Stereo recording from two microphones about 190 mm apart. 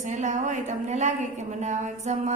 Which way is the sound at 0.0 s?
40° right (ahead or behind).